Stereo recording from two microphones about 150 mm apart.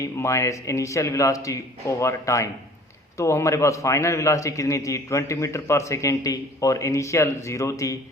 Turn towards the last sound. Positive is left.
turn(degrees=20)  # may be behind; listen again after turning